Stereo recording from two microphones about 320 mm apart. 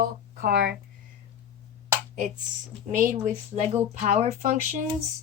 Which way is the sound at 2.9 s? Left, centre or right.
Right.